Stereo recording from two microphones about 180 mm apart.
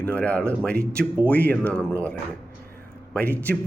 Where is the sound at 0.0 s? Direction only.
5° left (ahead or behind).